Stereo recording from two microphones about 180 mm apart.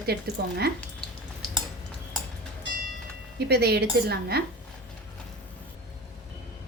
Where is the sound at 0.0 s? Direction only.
65° right (ahead or behind).